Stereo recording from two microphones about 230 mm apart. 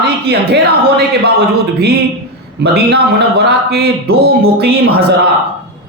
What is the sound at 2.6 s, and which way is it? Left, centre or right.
Speech, right.